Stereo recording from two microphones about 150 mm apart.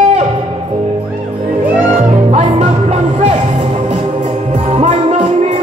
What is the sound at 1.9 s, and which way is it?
Music, 50° right (ahead or behind).